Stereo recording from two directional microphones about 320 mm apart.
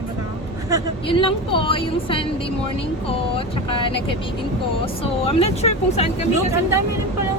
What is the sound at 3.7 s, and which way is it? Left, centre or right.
Speech, centre.